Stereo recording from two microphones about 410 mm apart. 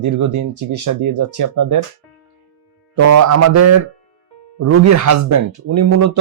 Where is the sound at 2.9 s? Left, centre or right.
Right.